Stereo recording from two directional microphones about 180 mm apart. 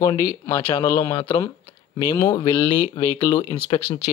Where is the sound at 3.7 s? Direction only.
35° left (ahead or behind).